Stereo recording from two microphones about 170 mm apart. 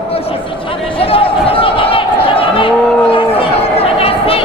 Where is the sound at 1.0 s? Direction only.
35° left (ahead or behind).